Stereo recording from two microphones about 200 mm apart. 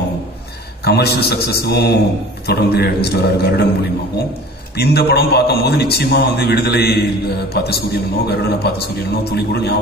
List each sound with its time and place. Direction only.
0.8 s a man's voice: 55° left (ahead or behind)
4.7 s a man's voice: 55° left (ahead or behind)